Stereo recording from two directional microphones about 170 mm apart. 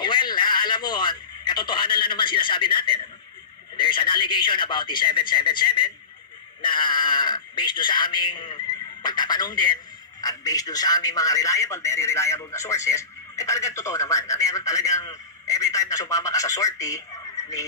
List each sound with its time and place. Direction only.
0.0 s radio: 25° left (ahead or behind)
3.7 s a man's voice: 30° left (ahead or behind)